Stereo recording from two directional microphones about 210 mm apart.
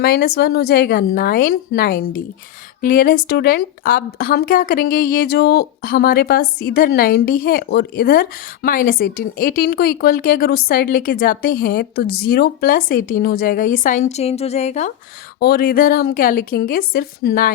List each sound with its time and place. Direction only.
0.0 s a woman's voice: 45° left (ahead or behind)
15.4 s speech: 45° left (ahead or behind)